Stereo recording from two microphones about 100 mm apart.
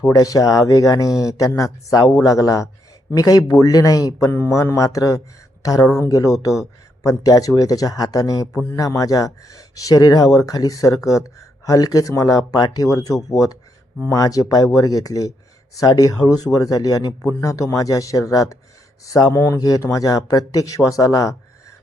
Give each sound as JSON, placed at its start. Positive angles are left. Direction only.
{"t": 0.0, "sound": "speech", "side_deg": 35}